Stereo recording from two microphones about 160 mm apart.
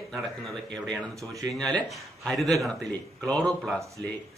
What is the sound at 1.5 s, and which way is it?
Speech, 5° left (ahead or behind).